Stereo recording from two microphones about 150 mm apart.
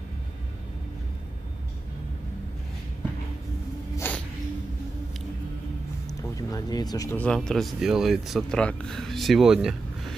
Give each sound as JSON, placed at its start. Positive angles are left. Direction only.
{"t": 3.9, "sound": "cat", "side_deg": 15}
{"t": 6.0, "sound": "speech", "side_deg": 25}
{"t": 7.2, "sound": "speech", "side_deg": 5}